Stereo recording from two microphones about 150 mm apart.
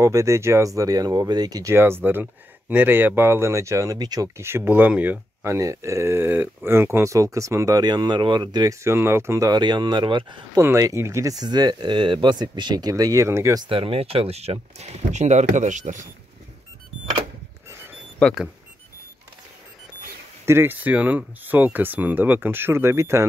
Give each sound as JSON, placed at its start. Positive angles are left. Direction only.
{"t": 0.0, "sound": "speech", "side_deg": -20}
{"t": 10.6, "sound": "speech", "side_deg": -20}
{"t": 13.7, "sound": "speech", "side_deg": -40}
{"t": 18.2, "sound": "speech", "side_deg": -5}
{"t": 20.4, "sound": "speech", "side_deg": -15}